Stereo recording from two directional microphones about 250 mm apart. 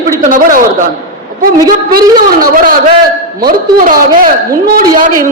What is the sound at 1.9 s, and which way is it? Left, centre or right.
A man's voice, right.